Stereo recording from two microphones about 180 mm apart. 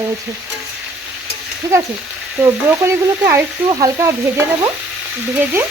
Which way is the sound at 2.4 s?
15° right (ahead or behind).